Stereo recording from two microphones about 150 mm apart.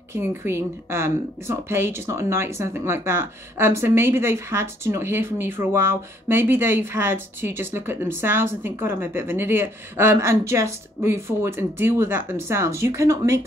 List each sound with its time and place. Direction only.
0.1 s speech: 15° right (ahead or behind)